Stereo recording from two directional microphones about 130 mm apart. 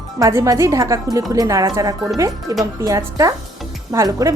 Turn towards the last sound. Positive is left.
turn(degrees=-25)  # may be behind; listen again after turning